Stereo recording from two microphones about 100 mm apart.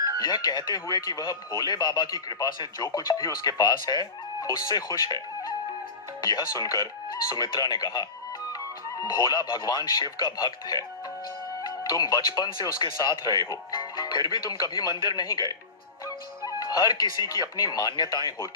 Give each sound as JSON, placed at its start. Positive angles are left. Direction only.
{"t": 0.2, "sound": "speech", "side_deg": 40}